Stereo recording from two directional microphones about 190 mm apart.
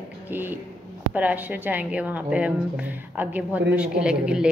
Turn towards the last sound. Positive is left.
turn(degrees=-5)  # may be behind; listen again after turning